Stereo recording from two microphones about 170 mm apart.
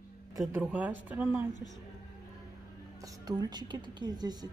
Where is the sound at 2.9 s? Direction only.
20° right (ahead or behind).